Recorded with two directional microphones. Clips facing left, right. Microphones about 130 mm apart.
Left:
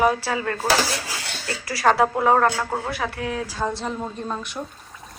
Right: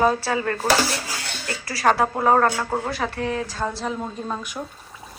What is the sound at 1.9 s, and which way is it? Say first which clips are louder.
Speech: even; 5° right (ahead or behind).